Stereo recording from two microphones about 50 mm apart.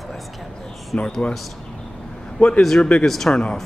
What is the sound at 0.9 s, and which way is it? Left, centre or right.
Speech, centre.